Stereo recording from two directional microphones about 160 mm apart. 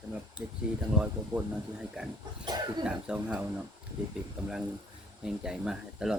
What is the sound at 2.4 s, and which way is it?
Speech, 25° right (ahead or behind).